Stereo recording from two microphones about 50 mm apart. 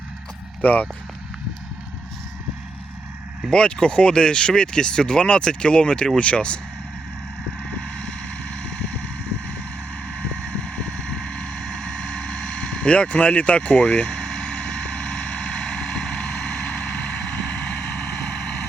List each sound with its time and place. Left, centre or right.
0.6 s speech: left
3.5 s speech: centre
7.6 s vehicle: centre
10.1 s vehicle: centre
12.8 s speech: left
14.1 s vehicle: centre